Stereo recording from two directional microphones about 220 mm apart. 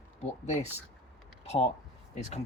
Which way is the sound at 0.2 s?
30° left (ahead or behind).